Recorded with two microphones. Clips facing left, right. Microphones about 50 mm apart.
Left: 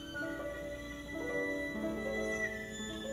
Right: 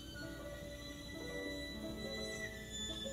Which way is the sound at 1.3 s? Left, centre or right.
Left.